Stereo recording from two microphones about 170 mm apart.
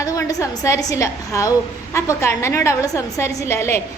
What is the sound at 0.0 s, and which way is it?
A woman's voice, 20° left (ahead or behind).